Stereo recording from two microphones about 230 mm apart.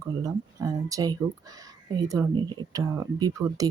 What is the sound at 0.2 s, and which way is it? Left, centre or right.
Speech, centre.